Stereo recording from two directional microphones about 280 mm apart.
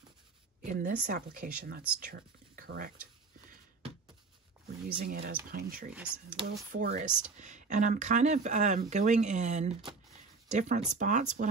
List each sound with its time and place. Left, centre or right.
0.7 s speech: right
4.8 s speech: right
6.4 s speech: centre
6.7 s speech: right